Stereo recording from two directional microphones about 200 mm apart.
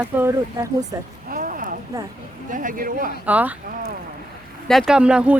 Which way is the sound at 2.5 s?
40° right (ahead or behind).